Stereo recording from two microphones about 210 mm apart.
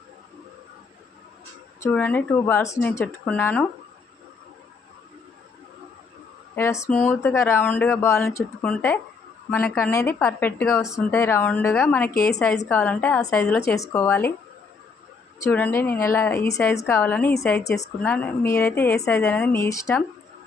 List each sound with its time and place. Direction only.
1.8 s speech: 10° left (ahead or behind)
6.6 s speech: 15° left (ahead or behind)
10.8 s speech: centre (ahead or behind)
11.1 s speech: 10° left (ahead or behind)
12.1 s a woman's voice: 45° left (ahead or behind)
12.5 s speech: 5° left (ahead or behind)
15.4 s speech: 10° left (ahead or behind)